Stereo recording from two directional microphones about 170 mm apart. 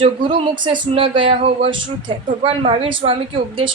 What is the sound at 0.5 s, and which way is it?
Speech, 25° right (ahead or behind).